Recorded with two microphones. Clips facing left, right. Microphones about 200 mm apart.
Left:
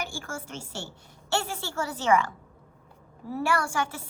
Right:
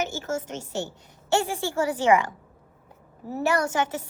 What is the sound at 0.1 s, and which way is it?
Speech, 20° right (ahead or behind).